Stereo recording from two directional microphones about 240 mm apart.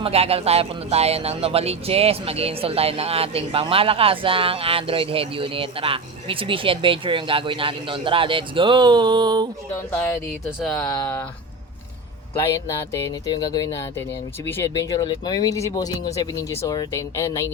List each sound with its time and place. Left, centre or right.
0.0 s speech: right
9.7 s speech: centre
12.4 s speech: centre